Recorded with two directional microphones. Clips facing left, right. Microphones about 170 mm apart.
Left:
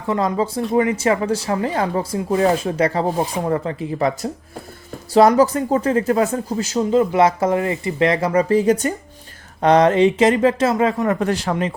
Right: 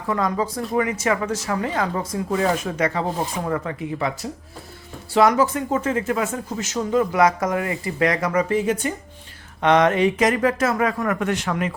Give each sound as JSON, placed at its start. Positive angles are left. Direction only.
{"t": 0.1, "sound": "speech", "side_deg": 25}
{"t": 6.7, "sound": "speech", "side_deg": 25}